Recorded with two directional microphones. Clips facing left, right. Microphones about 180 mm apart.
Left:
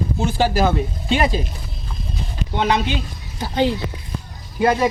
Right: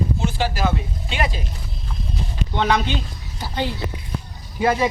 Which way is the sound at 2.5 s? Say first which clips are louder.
Left 1 dB; 20° left (ahead or behind).